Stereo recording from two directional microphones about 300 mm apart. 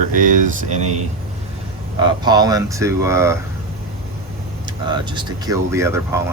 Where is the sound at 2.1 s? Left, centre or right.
Centre.